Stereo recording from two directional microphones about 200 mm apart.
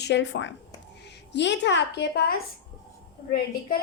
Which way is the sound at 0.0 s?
65° left (ahead or behind).